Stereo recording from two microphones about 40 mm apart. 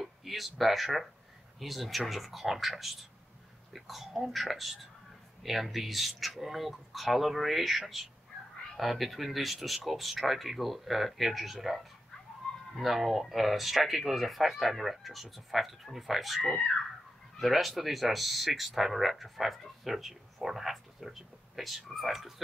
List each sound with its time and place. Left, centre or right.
0.0 s a sound: centre
0.6 s speech: centre
16.4 s speech: left
17.4 s speech: centre